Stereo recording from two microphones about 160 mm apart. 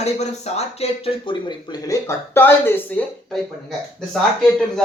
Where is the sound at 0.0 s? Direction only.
40° left (ahead or behind); by 3.0 s 15° left (ahead or behind).